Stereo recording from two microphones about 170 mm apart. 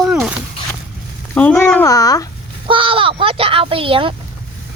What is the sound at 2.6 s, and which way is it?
Speech, 30° right (ahead or behind).